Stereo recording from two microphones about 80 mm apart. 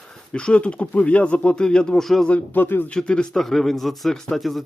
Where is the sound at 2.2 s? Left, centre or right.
Centre.